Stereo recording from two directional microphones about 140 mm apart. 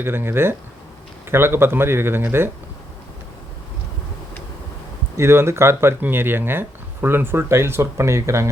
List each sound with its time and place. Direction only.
0.0 s speech: 15° right (ahead or behind)
5.1 s speech: 20° right (ahead or behind)